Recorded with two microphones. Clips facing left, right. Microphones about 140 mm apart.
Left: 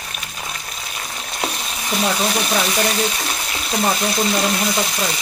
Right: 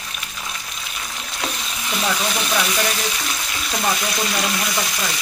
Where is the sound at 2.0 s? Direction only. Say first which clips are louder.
Left 3 dB; 30° left (ahead or behind).